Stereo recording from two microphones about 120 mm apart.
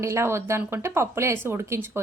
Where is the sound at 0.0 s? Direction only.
25° right (ahead or behind).